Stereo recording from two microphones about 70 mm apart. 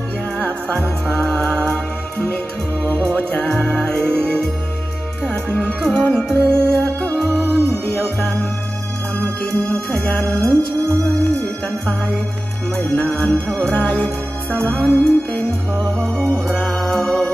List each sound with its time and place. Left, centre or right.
0.4 s music: centre
2.2 s music: left
5.2 s music: centre
6.5 s music: right
7.0 s music: centre
7.4 s music: right
7.8 s music: centre
9.4 s music: centre
10.2 s music: right
12.7 s music: centre